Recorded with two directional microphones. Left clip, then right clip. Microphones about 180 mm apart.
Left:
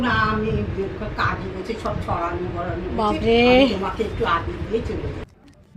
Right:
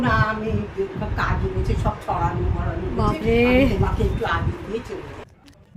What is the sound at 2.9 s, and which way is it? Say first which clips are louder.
Speech: left 2 dB; 5° right (ahead or behind).